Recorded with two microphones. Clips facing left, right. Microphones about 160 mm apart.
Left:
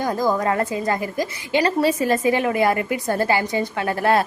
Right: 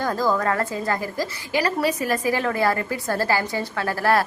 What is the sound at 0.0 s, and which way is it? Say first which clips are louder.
A woman's voice: left 1 dB; 15° left (ahead or behind).